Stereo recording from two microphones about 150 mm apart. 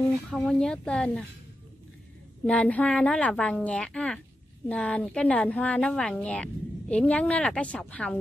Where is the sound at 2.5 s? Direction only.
10° left (ahead or behind).